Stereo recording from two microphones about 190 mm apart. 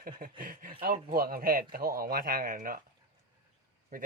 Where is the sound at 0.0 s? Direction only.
50° right (ahead or behind).